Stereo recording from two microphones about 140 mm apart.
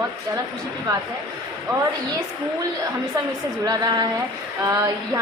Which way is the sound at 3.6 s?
25° right (ahead or behind).